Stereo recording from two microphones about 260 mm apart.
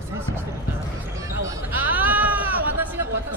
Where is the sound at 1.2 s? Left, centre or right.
Centre.